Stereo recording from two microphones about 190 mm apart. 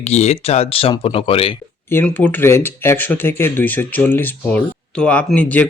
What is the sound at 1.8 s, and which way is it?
Speech, 10° left (ahead or behind).